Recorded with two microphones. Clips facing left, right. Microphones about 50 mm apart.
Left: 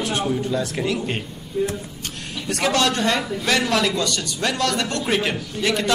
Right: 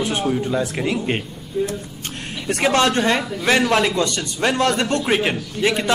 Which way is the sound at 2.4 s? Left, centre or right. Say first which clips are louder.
Right 3 dB; right.